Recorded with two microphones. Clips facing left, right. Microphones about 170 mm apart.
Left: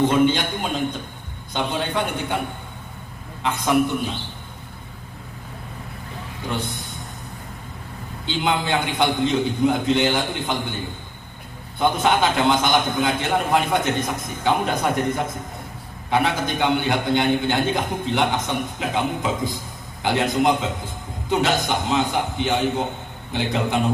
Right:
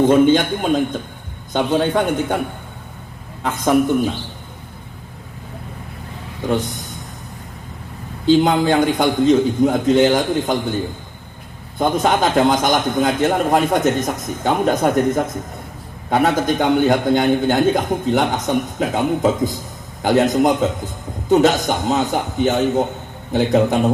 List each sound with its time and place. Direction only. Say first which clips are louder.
0.1 s a man's voice: right 6 dB; 50° right (ahead or behind)
3.4 s a man's voice: right 4 dB; 45° right (ahead or behind)
8.3 s a man's voice: right 9 dB; 40° right (ahead or behind)
11.8 s a man's voice: right 3 dB; 40° right (ahead or behind)